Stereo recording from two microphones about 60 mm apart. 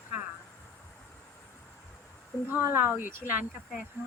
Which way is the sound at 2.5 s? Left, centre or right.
Right.